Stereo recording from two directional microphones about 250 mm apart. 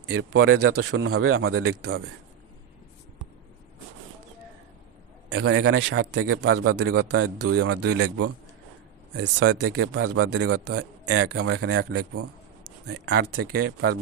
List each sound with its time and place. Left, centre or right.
0.1 s speech: right
5.3 s a man's voice: right
5.9 s speech: right
6.8 s a man's voice: right
7.1 s speech: right
7.9 s speech: right
9.1 s a man's voice: right
9.5 s speech: right
11.6 s speech: right
13.6 s speech: right